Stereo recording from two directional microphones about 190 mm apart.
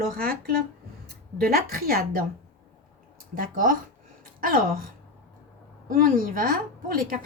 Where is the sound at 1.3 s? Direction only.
50° right (ahead or behind).